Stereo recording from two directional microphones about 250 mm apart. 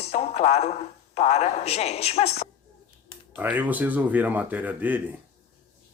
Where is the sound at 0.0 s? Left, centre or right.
Left.